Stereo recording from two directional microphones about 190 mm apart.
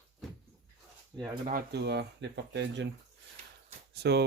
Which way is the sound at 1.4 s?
55° right (ahead or behind).